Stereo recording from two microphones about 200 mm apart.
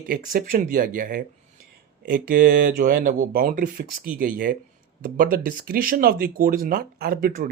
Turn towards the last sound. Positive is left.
turn(degrees=-45)  # may be behind; listen again after turning